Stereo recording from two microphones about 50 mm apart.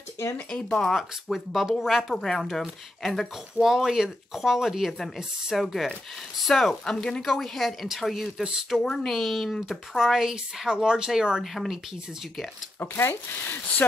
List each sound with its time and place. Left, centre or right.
0.5 s speech: left
0.7 s speech: centre
3.6 s speech: centre
6.8 s speech: centre
8.8 s speech: centre
11.4 s speech: centre
12.7 s speech: left